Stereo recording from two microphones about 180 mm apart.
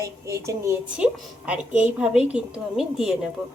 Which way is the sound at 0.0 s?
15° right (ahead or behind).